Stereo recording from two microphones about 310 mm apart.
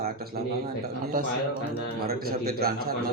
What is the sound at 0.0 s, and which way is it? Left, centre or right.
Speech, right.